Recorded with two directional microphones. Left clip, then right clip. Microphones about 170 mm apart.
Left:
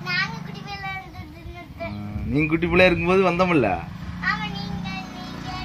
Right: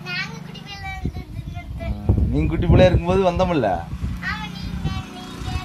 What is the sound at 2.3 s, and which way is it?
A man's voice, 30° right (ahead or behind).